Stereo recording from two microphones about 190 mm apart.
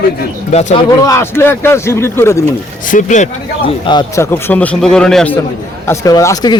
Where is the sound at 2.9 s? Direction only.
40° left (ahead or behind).